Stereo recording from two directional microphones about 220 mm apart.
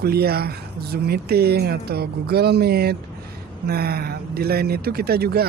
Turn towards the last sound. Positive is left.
turn(degrees=-45)  # may be behind; listen again after turning